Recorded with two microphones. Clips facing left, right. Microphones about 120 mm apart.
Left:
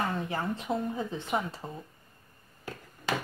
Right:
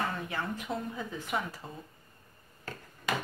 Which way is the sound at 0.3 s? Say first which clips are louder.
Left 4 dB; 35° left (ahead or behind).